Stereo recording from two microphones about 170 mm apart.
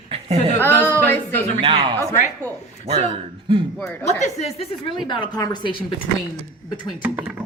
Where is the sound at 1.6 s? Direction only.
25° right (ahead or behind).